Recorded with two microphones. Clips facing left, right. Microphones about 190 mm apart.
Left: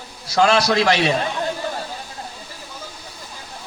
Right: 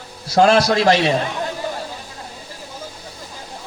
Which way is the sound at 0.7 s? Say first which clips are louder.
Right 2 dB; 30° right (ahead or behind).